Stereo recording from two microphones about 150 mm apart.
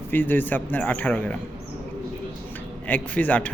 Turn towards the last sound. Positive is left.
turn(degrees=10)  # may be behind; listen again after turning